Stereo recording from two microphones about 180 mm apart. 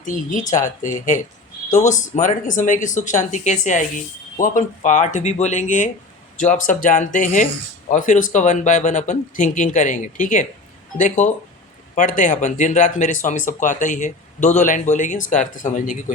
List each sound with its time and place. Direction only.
0.0 s speech: 45° left (ahead or behind)